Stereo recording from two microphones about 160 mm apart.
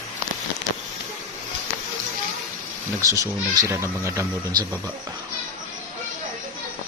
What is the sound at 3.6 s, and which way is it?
Speech, 15° right (ahead or behind).